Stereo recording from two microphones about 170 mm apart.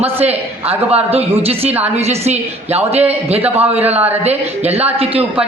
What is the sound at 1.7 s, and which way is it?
Speech, 10° right (ahead or behind).